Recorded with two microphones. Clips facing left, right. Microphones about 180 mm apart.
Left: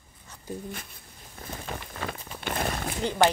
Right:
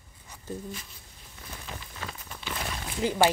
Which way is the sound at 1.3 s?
55° left (ahead or behind).